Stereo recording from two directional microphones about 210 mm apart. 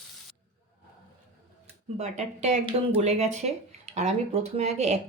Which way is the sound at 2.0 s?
30° right (ahead or behind).